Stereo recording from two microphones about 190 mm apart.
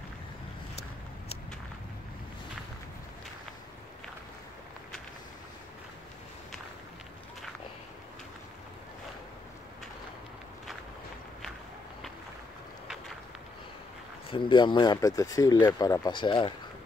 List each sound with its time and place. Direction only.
14.3 s speech: 25° left (ahead or behind)